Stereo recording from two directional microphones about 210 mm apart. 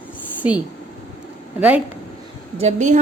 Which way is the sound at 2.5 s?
35° right (ahead or behind).